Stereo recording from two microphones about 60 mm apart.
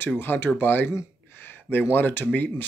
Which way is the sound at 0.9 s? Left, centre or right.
Left.